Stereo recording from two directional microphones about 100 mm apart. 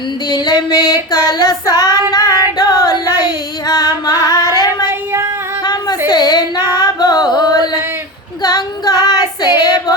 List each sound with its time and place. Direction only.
0.3 s female singing: 45° left (ahead or behind)
4.0 s singing: 45° left (ahead or behind)
4.9 s female singing: 25° right (ahead or behind)
5.6 s a sound: 45° left (ahead or behind)
6.1 s child singing: 45° left (ahead or behind)
6.7 s carnatic music: 40° left (ahead or behind)
8.4 s female singing: 45° left (ahead or behind)